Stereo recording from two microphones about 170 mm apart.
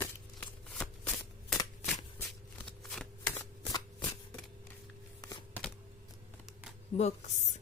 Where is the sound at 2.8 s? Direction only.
5° left (ahead or behind).